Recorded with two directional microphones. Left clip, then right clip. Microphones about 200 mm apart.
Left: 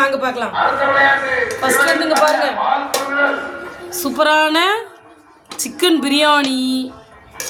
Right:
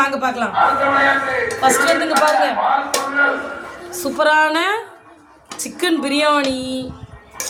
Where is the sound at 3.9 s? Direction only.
45° left (ahead or behind).